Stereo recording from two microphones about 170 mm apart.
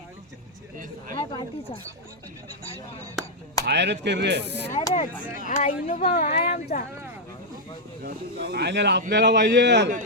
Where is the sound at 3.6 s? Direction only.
90° right.